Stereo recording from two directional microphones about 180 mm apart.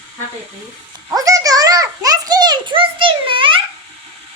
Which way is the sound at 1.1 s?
20° right (ahead or behind).